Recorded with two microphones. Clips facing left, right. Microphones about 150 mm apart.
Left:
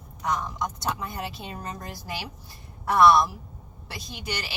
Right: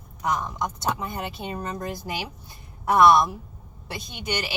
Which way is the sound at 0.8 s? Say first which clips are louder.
Right 3 dB; 25° right (ahead or behind).